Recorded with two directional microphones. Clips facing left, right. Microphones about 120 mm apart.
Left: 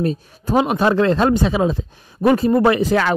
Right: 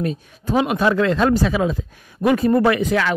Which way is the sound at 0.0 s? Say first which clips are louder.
Left 3 dB; 35° left (ahead or behind).